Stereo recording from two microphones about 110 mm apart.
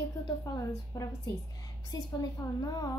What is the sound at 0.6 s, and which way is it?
Speech, 30° left (ahead or behind).